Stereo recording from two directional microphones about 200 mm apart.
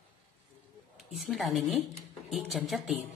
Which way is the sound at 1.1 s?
Centre (ahead or behind).